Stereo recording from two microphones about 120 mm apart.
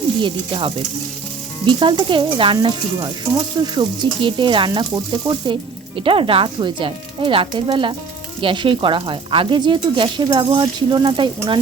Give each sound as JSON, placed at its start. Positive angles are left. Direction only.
{"t": 0.2, "sound": "speech", "side_deg": -45}
{"t": 2.6, "sound": "sizzle", "side_deg": -40}
{"t": 6.0, "sound": "speech", "side_deg": -45}
{"t": 8.4, "sound": "sizzle", "side_deg": -45}